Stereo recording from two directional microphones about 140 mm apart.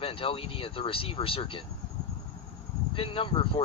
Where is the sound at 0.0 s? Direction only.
40° left (ahead or behind).